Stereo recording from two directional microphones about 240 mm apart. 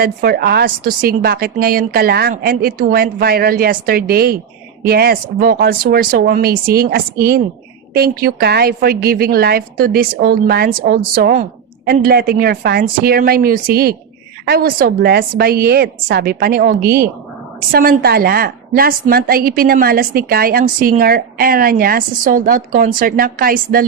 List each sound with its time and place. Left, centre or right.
0.0 s a woman's voice: right